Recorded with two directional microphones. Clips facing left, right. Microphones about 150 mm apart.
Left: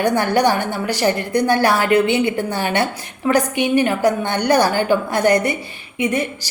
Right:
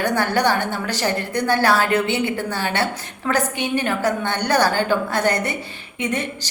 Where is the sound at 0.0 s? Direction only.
15° left (ahead or behind).